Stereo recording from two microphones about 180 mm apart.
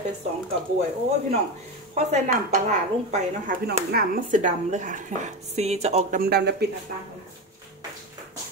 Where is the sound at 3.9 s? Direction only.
55° right (ahead or behind); by 6.2 s 35° right (ahead or behind).